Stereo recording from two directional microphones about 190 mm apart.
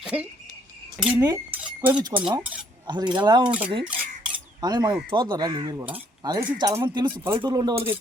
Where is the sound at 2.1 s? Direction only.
20° right (ahead or behind).